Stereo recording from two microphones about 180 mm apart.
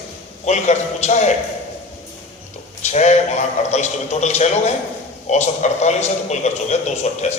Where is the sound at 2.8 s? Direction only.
40° left (ahead or behind).